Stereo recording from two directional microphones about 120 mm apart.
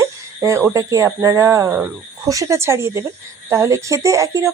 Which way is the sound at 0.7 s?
30° right (ahead or behind).